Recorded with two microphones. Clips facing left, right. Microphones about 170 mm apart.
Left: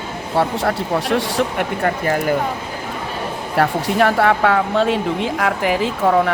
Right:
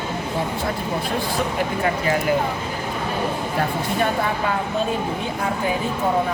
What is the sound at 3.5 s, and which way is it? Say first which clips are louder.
Speech: left 8 dB; 85° left.